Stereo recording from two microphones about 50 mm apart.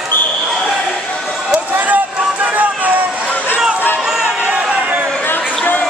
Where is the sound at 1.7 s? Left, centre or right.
Right.